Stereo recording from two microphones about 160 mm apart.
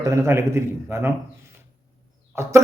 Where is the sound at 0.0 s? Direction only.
20° right (ahead or behind).